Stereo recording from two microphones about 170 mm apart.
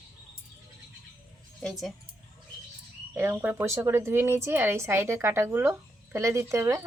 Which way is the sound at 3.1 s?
10° right (ahead or behind).